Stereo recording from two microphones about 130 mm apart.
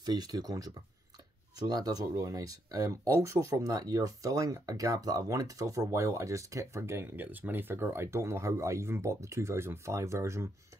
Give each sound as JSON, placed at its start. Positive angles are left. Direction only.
{"t": 0.0, "sound": "speech", "side_deg": -30}